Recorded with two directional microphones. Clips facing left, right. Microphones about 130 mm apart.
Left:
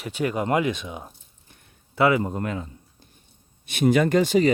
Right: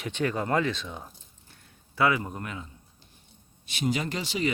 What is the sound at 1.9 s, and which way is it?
Speech, 25° left (ahead or behind).